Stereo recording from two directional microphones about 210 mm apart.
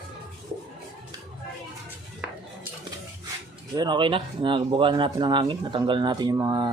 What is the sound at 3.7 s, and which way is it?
Speech, 20° right (ahead or behind).